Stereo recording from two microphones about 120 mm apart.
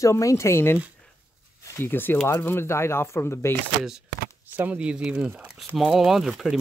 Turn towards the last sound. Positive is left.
turn(degrees=-5)  # may be behind; listen again after turning